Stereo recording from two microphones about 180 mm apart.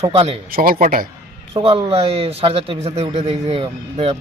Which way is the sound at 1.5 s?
30° right (ahead or behind).